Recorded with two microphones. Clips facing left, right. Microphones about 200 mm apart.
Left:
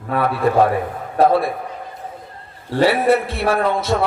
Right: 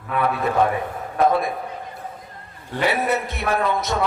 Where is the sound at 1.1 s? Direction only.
30° left (ahead or behind).